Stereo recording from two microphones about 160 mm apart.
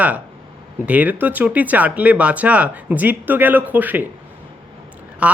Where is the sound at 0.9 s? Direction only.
10° right (ahead or behind).